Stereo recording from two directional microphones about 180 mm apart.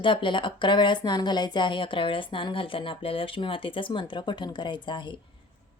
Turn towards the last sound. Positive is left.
turn(degrees=25)  # may be behind; listen again after turning